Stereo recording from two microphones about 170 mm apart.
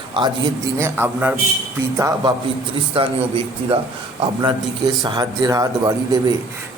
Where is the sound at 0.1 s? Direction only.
25° right (ahead or behind).